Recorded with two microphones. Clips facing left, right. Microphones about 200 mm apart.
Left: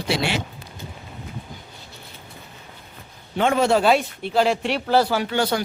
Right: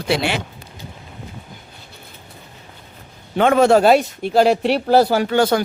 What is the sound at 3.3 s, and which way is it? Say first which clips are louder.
Speech: right 6 dB; 60° right (ahead or behind).